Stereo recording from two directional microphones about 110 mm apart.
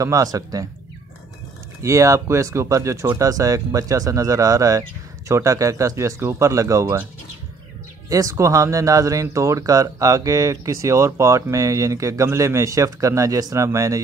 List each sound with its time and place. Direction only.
0.0 s speech: 30° right (ahead or behind)
1.8 s speech: 30° right (ahead or behind)
8.1 s speech: 30° right (ahead or behind)